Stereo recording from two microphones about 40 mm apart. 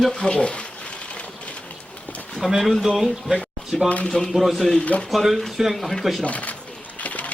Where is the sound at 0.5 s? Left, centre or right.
Left.